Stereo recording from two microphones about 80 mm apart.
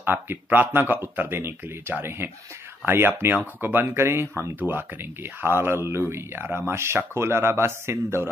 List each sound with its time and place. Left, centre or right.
0.0 s speech: right